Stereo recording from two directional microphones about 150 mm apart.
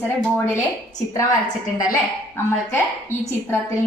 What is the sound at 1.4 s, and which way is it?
Speech, 25° left (ahead or behind).